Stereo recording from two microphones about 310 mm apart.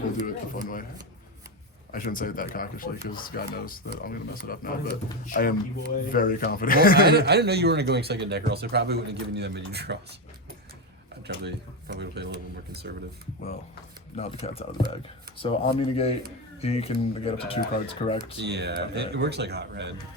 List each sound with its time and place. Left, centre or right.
0.3 s speech: left
1.9 s speech: left
6.9 s speech: right
11.3 s speech: right
14.2 s speech: centre
18.3 s speech: right